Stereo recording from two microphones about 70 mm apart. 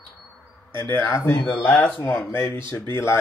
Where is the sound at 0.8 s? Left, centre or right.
Left.